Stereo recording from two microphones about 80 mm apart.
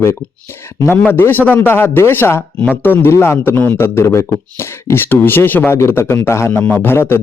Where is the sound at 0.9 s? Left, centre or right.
Left.